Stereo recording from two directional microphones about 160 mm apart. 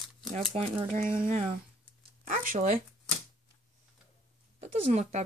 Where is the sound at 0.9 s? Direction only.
60° right (ahead or behind).